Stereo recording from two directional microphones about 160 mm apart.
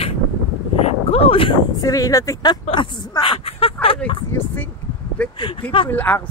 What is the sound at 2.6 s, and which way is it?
Speech, 30° left (ahead or behind).